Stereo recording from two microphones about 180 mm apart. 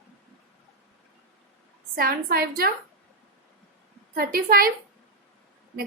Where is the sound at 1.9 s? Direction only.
55° right (ahead or behind).